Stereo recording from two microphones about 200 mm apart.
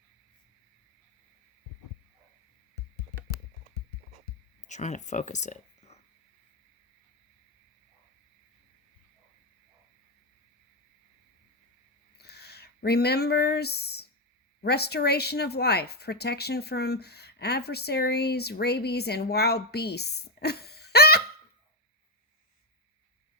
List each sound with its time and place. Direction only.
4.7 s speech: 35° left (ahead or behind)
12.1 s a sound: 55° left (ahead or behind)
14.6 s speech: 55° left (ahead or behind)